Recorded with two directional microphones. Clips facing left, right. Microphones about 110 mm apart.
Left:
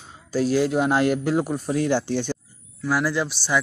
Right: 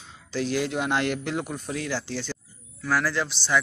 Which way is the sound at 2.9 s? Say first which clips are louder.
Left 3 dB; 10° left (ahead or behind).